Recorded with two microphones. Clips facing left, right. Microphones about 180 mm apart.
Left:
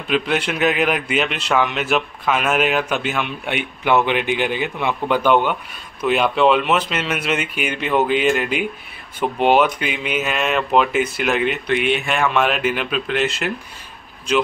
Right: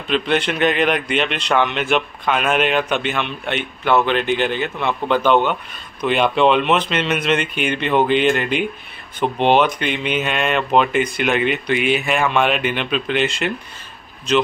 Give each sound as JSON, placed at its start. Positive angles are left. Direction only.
{"t": 0.1, "sound": "a man's voice", "side_deg": 5}